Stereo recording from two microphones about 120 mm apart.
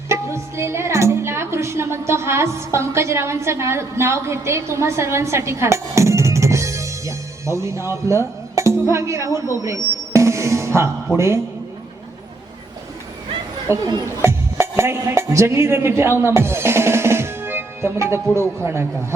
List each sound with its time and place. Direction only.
0.1 s a woman's voice: 25° right (ahead or behind)
11.1 s a man's voice: 20° left (ahead or behind)
13.7 s speech: 20° right (ahead or behind)